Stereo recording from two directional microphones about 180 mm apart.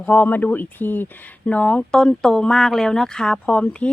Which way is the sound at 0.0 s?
10° left (ahead or behind).